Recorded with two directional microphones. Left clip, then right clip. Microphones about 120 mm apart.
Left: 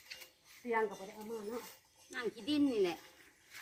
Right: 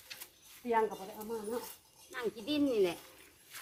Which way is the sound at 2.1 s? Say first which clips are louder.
Right 1 dB; 75° left (ahead or behind).